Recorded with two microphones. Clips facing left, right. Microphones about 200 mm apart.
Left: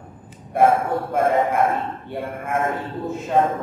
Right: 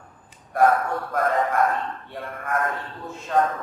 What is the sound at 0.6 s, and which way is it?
A man's voice, 25° left (ahead or behind).